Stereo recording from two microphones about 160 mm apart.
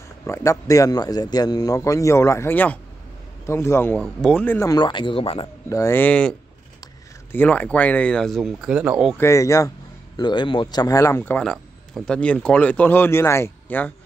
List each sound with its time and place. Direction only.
0.3 s a man's voice: 20° left (ahead or behind); by 5.5 s 35° left (ahead or behind)
5.7 s speech: 15° left (ahead or behind)
7.3 s speech: 10° left (ahead or behind); by 9.1 s 5° right (ahead or behind)
9.2 s a man's voice: 20° left (ahead or behind)